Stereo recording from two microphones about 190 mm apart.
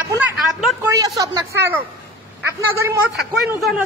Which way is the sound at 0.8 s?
20° right (ahead or behind).